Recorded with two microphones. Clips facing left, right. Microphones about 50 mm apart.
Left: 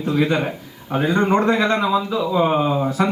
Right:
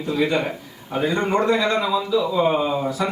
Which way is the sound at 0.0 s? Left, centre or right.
Left.